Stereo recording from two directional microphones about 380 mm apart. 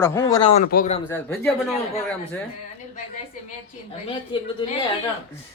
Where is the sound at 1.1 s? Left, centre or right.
Centre.